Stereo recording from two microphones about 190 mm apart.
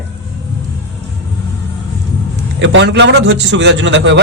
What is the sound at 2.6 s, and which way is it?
A man's voice, 70° right (ahead or behind).